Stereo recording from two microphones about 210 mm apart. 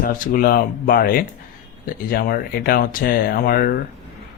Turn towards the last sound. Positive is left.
turn(degrees=45)  # may be behind; listen again after turning